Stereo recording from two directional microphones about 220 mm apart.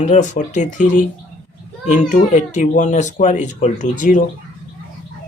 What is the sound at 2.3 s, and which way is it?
Speech, 35° left (ahead or behind).